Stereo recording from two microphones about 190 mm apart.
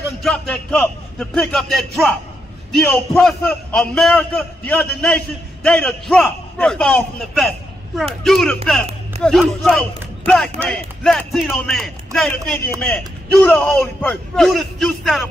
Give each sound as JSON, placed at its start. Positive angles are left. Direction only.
{"t": 0.2, "sound": "a man's voice", "side_deg": 5}